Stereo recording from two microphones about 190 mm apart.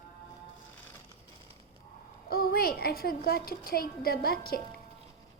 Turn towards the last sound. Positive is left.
turn(degrees=55)  # may be behind; listen again after turning